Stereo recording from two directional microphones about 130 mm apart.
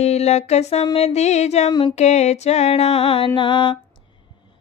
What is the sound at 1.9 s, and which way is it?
Music, 60° left (ahead or behind).